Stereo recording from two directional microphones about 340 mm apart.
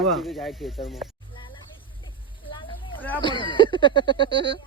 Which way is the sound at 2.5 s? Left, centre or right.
Centre.